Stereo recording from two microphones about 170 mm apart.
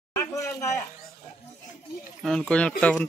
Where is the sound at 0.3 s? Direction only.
20° left (ahead or behind).